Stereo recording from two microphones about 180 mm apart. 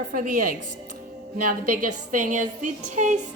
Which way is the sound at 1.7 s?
45° right (ahead or behind).